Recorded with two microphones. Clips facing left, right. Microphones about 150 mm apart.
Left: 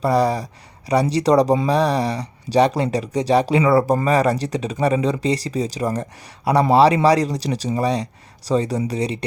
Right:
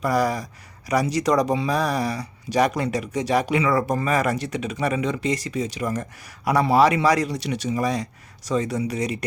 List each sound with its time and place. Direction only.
0.0 s speech: 30° left (ahead or behind)